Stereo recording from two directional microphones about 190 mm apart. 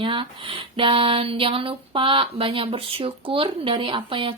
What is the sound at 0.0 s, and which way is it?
Speech, 25° right (ahead or behind).